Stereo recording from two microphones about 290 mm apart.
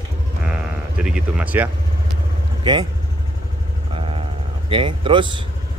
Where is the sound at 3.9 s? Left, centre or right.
Centre.